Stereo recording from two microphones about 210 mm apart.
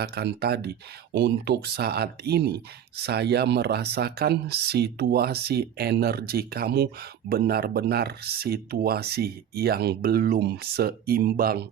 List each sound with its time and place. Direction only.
0.0 s speech: 50° right (ahead or behind)